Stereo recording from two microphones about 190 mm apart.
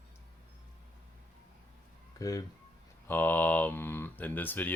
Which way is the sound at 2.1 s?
15° left (ahead or behind).